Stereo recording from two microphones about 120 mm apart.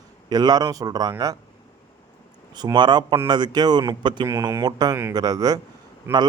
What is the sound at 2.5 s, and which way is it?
Speech, 35° right (ahead or behind).